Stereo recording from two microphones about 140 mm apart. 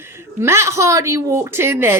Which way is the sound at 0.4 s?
20° right (ahead or behind).